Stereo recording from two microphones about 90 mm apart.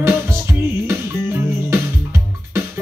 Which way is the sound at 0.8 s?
30° right (ahead or behind).